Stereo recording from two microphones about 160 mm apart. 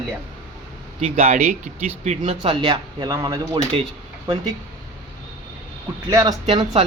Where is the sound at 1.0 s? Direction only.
45° right (ahead or behind); by 3.8 s 25° right (ahead or behind).